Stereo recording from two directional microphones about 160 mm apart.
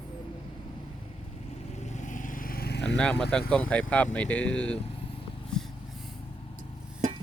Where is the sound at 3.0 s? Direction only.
5° left (ahead or behind).